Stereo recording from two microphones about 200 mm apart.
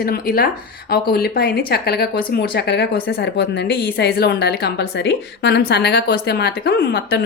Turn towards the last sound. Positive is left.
turn(degrees=55)  # may be behind; listen again after turning